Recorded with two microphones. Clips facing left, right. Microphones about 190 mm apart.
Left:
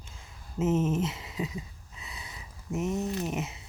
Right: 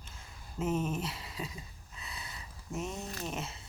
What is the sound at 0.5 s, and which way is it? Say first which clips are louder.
Speech: left 6 dB; 20° left (ahead or behind).